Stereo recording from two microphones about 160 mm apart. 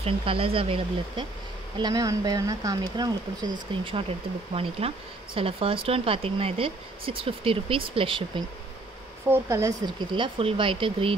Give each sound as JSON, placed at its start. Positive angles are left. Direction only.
{"t": 0.0, "sound": "speech", "side_deg": -35}
{"t": 1.8, "sound": "speech", "side_deg": -25}
{"t": 9.3, "sound": "speech", "side_deg": -20}